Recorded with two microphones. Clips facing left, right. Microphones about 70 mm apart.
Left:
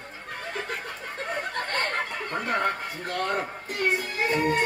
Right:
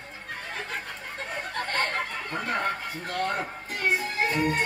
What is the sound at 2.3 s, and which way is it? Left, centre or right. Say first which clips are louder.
Speech: left 3 dB; left.